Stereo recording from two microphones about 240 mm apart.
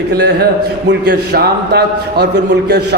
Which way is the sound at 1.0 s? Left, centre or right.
Right.